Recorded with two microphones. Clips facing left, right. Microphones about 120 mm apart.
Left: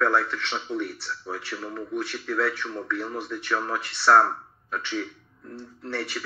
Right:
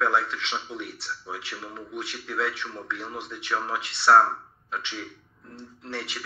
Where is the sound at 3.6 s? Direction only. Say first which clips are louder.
Left 1 dB; 50° left (ahead or behind).